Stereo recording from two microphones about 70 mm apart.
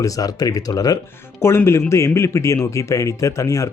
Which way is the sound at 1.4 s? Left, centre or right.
Left.